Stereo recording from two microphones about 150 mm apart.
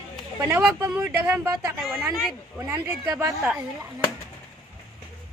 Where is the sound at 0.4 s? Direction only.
10° right (ahead or behind).